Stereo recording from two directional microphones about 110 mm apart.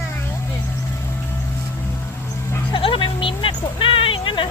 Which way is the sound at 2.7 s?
50° left (ahead or behind).